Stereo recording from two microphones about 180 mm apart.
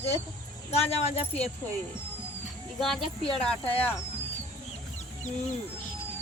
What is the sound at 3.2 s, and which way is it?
Speech, 30° left (ahead or behind).